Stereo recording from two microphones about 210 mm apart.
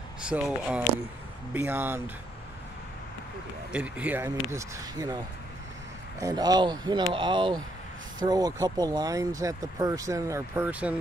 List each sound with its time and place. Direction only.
0.3 s speech: 5° right (ahead or behind)
3.7 s speech: 5° right (ahead or behind)